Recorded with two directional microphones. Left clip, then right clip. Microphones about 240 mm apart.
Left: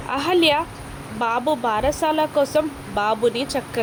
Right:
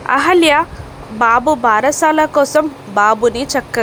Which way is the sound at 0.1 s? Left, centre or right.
Centre.